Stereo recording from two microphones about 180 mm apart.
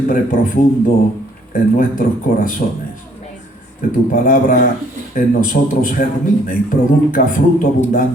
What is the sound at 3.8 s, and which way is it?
A man's voice, 50° left (ahead or behind).